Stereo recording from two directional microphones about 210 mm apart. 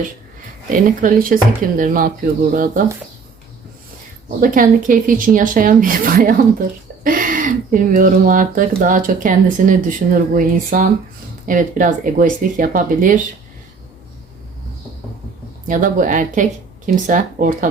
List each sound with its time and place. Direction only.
0.9 s speech: 40° right (ahead or behind)
4.4 s speech: 40° right (ahead or behind)
15.6 s speech: 40° right (ahead or behind)